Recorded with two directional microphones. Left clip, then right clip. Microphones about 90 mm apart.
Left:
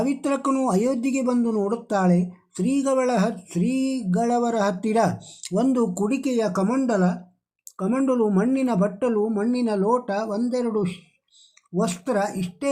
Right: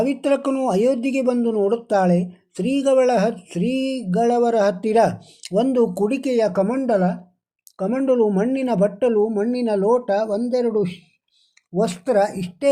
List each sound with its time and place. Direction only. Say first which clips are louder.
0.0 s speech: right 4 dB; 25° right (ahead or behind)